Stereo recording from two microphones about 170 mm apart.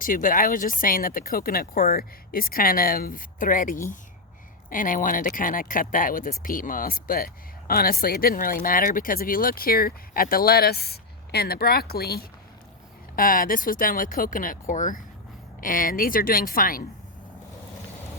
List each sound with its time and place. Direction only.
0.0 s speech: 55° left (ahead or behind)